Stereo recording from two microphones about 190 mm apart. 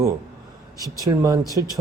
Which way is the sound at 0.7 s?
20° left (ahead or behind).